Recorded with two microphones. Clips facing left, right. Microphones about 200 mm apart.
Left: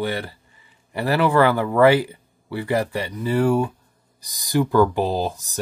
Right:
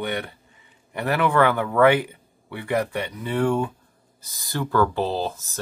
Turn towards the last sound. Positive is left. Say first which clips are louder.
# left 3 dB
turn(degrees=15)  # may be behind; listen again after turning